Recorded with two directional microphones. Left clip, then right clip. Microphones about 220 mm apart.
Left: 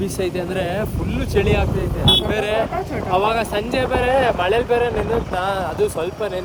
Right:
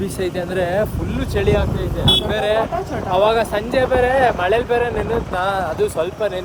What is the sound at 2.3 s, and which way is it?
Speech, 50° left (ahead or behind).